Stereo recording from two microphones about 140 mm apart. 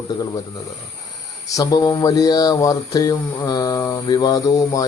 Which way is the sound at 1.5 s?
25° left (ahead or behind).